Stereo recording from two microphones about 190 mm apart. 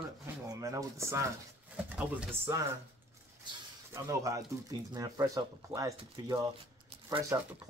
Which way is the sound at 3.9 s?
15° right (ahead or behind).